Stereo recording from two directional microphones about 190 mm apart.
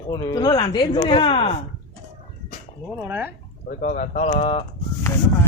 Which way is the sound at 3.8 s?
40° left (ahead or behind).